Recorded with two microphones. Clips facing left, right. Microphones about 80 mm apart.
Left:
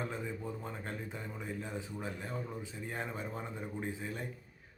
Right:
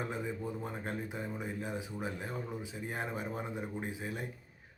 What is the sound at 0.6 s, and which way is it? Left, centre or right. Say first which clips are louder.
A man's voice: right 3 dB; centre.